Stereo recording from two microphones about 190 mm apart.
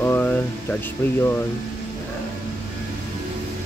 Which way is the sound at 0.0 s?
10° left (ahead or behind).